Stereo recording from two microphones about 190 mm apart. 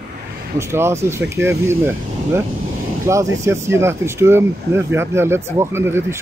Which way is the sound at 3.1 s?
15° right (ahead or behind).